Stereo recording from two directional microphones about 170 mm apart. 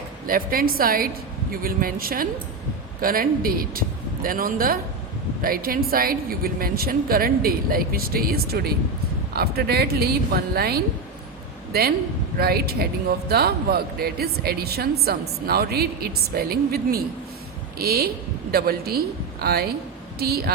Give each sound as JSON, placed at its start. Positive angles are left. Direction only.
{"t": 0.3, "sound": "a woman's voice", "side_deg": -60}